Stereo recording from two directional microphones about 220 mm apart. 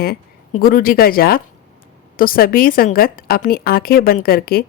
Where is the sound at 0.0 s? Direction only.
45° left (ahead or behind).